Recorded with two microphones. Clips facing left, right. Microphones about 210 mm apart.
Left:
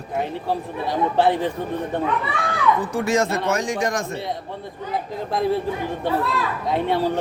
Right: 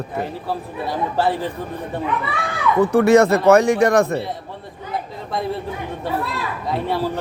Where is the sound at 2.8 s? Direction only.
60° right (ahead or behind).